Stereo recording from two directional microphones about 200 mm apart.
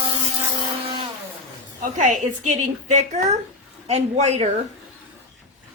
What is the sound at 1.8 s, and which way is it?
A woman's voice, 40° right (ahead or behind).